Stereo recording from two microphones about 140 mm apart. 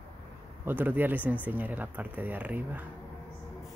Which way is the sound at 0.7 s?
15° right (ahead or behind).